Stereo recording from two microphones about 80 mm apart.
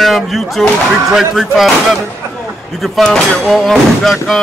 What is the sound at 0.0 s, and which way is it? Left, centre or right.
Speech, centre.